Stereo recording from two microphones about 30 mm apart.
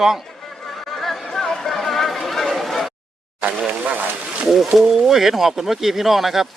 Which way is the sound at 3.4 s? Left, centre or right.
Right.